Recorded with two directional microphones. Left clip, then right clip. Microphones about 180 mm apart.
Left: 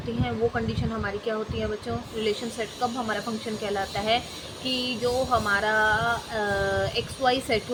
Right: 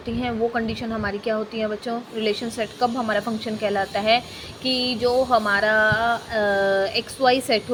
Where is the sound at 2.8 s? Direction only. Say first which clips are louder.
Right 6 dB; 45° right (ahead or behind).